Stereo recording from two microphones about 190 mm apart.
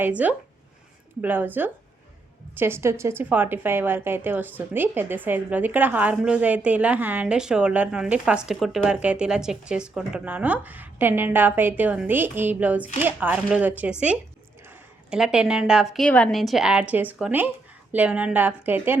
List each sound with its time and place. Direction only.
0.0 s a woman's voice: 10° right (ahead or behind)
15.1 s a woman's voice: 5° right (ahead or behind)